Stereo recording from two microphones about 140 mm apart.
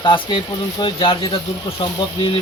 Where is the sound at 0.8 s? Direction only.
35° left (ahead or behind).